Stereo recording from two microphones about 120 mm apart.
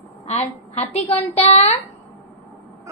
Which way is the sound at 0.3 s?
65° left (ahead or behind).